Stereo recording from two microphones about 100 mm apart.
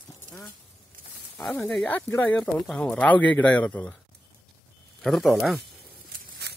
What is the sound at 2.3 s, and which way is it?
Speech, 10° left (ahead or behind).